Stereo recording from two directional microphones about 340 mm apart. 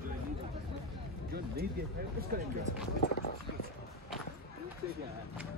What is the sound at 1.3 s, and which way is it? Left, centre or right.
Speech, right.